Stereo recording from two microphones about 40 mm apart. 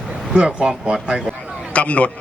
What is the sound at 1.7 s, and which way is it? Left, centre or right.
Speech, left.